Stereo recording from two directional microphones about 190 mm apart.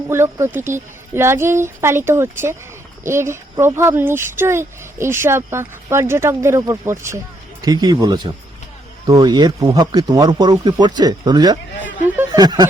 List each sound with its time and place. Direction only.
0.1 s speech: 15° right (ahead or behind)
12.0 s snicker: 10° right (ahead or behind)
12.4 s speech: 20° right (ahead or behind)